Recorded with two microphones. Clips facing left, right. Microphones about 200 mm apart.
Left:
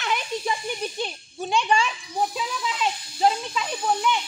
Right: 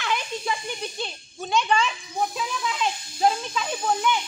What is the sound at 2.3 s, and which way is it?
A child's voice, centre (ahead or behind).